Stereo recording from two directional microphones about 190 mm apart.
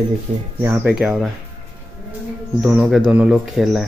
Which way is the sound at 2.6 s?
5° right (ahead or behind).